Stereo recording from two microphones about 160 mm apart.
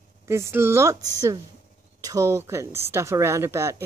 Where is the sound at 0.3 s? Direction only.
15° right (ahead or behind).